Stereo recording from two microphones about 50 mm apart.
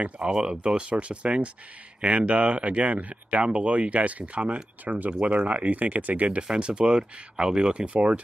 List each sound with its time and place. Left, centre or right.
0.2 s speech: centre
6.4 s speech: centre